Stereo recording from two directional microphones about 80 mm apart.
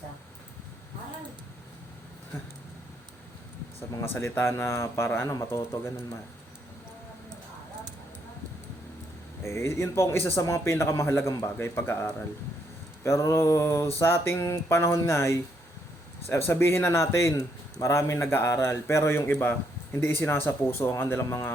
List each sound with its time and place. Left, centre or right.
3.8 s a man's voice: left
9.4 s a man's voice: left